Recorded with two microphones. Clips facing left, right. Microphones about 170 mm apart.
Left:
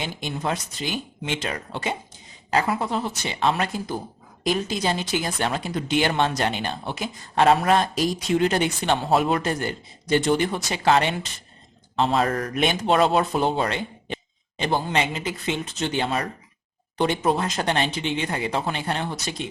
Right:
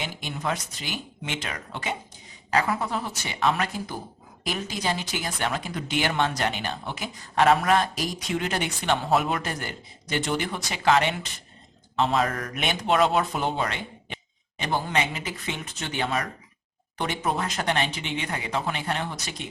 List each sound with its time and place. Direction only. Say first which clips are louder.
0.0 s speech: left 3 dB; 30° left (ahead or behind)